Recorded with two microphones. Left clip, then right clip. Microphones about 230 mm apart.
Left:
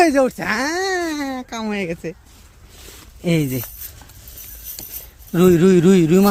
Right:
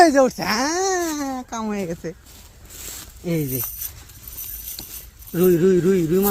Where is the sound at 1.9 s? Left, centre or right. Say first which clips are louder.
Left 3 dB; left.